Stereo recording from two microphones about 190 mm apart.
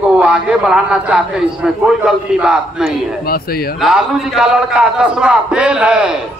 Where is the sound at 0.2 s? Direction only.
5° right (ahead or behind).